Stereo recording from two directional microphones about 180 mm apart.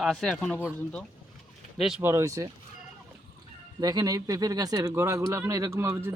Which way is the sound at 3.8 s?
20° right (ahead or behind).